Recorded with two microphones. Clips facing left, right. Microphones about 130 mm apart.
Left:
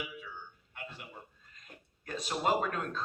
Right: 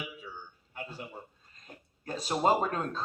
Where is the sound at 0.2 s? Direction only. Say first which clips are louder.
Right 1 dB; 35° right (ahead or behind).